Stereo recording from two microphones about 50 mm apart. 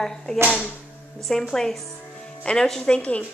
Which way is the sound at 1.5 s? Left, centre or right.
Centre.